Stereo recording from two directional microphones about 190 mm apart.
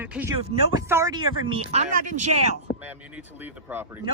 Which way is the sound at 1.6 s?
35° right (ahead or behind).